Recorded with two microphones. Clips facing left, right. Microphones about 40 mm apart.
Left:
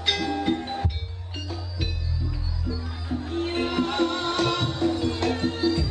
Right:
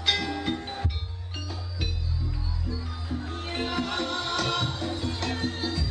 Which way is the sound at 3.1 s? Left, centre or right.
Left.